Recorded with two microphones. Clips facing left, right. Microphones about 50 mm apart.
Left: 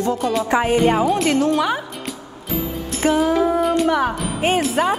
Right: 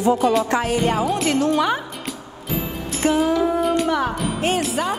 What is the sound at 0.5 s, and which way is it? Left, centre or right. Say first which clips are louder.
Speech: left 3 dB; centre.